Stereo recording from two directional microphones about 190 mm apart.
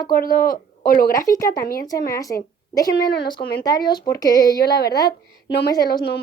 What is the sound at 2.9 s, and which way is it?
Speech, 55° left (ahead or behind).